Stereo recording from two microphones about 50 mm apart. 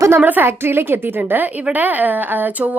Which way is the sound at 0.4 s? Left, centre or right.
Right.